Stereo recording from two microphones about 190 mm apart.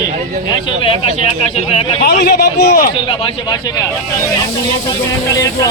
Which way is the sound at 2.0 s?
55° left (ahead or behind).